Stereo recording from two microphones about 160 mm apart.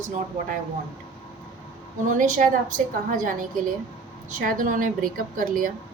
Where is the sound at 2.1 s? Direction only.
55° right (ahead or behind).